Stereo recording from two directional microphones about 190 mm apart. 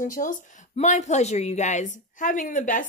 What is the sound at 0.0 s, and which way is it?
A woman's voice, 45° left (ahead or behind).